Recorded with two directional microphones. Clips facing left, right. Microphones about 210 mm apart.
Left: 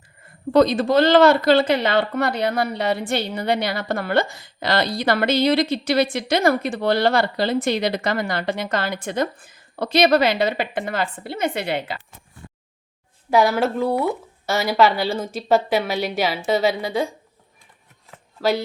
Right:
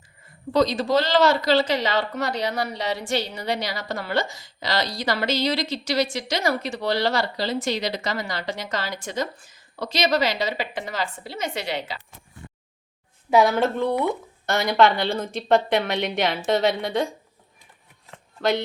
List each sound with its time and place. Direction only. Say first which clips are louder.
0.5 s a woman's voice: left 4 dB; 55° left (ahead or behind)
13.3 s a woman's voice: left 1 dB; centre (ahead or behind)
18.1 s shuffling cards: left 2 dB; 5° left (ahead or behind)